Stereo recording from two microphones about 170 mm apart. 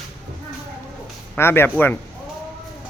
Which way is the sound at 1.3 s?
15° left (ahead or behind).